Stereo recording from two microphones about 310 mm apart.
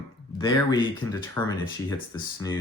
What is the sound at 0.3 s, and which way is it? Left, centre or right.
Speech, centre.